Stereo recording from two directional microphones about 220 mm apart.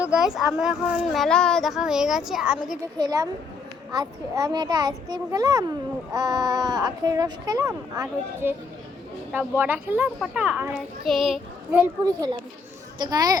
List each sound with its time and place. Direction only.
0.0 s speech: 5° right (ahead or behind)
3.0 s a child's voice: 15° right (ahead or behind)
12.0 s a child's voice: 15° right (ahead or behind)